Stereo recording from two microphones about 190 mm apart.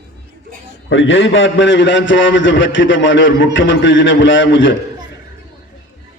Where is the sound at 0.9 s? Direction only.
80° left.